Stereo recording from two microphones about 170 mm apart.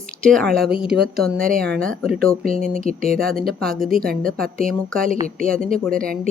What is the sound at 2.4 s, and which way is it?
Speech, 55° right (ahead or behind).